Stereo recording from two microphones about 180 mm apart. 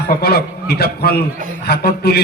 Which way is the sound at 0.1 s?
60° left (ahead or behind).